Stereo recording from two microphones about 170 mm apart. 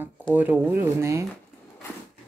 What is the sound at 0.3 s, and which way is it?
Speech, 10° right (ahead or behind).